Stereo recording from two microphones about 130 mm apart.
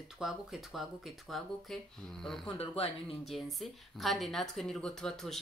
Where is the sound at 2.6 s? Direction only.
50° left (ahead or behind).